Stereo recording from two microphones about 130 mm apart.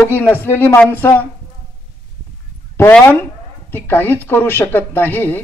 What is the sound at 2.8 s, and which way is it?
A man's voice, 15° left (ahead or behind).